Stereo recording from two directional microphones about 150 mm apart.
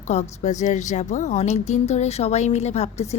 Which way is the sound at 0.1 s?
50° left (ahead or behind).